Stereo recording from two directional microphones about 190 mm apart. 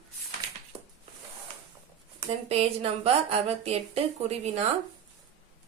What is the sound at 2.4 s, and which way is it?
Speech, 30° right (ahead or behind).